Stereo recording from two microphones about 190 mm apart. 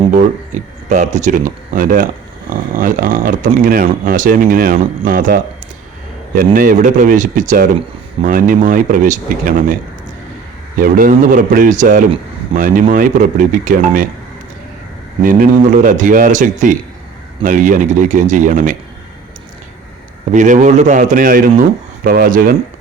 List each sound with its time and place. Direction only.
0.1 s speech: 40° right (ahead or behind)
10.8 s speech: 50° right (ahead or behind)
15.2 s speech: 45° right (ahead or behind)
20.3 s a man's voice: 40° right (ahead or behind)